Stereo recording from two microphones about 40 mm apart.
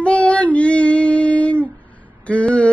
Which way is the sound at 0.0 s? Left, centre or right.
Left.